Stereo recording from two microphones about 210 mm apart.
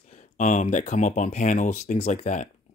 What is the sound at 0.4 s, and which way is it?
Speech, 35° left (ahead or behind).